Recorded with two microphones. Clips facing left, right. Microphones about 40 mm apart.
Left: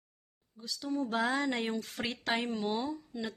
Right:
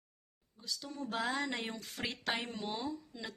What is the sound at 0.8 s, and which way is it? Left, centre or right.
Speech, centre.